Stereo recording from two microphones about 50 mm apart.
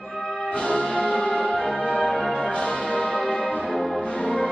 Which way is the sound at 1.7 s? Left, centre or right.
Centre.